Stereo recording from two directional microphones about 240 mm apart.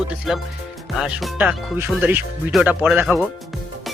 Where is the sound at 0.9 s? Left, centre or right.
Centre.